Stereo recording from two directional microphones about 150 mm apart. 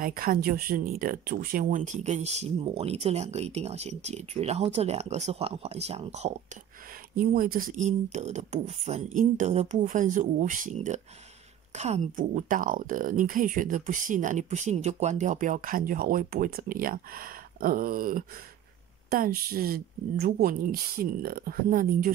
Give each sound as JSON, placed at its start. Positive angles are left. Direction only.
{"t": 0.0, "sound": "speech", "side_deg": -75}
{"t": 7.2, "sound": "speech", "side_deg": -75}